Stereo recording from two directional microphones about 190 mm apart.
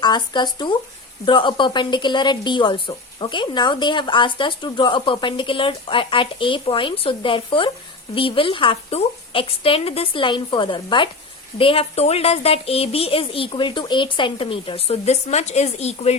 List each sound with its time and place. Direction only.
0.0 s a woman's voice: 25° left (ahead or behind)